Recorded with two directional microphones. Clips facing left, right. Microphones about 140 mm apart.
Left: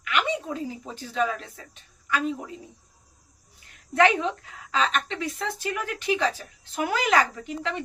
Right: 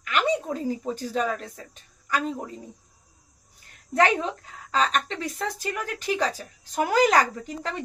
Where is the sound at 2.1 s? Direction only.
40° right (ahead or behind).